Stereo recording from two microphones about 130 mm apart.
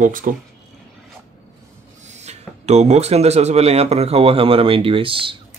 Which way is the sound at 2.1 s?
60° right (ahead or behind).